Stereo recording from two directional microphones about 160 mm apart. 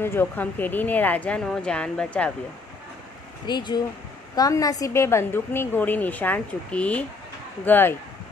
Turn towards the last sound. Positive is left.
turn(degrees=10)  # may be behind; listen again after turning